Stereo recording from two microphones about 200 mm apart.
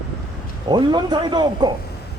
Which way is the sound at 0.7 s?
20° right (ahead or behind).